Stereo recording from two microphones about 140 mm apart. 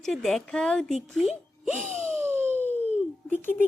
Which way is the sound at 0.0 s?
Centre (ahead or behind).